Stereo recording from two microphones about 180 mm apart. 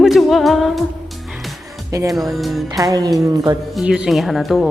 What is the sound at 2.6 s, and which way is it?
Speech, 20° right (ahead or behind).